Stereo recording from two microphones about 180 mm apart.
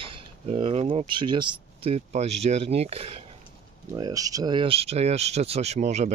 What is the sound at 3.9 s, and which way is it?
Speech, 20° right (ahead or behind).